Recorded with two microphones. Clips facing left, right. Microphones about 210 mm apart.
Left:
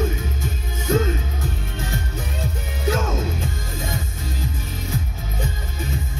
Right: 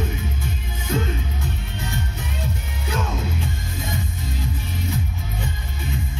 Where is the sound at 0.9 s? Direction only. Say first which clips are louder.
Left 5 dB; 45° left (ahead or behind).